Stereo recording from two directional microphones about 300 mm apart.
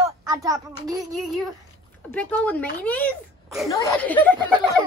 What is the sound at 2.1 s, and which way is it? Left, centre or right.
A child's voice, centre.